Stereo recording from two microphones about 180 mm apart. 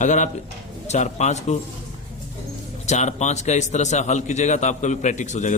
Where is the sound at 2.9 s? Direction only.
40° left (ahead or behind).